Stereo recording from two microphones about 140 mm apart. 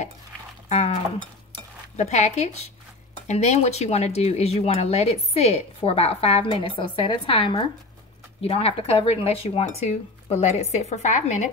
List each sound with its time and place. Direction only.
0.7 s livestock: 50° left (ahead or behind)
2.0 s speech: 55° left (ahead or behind)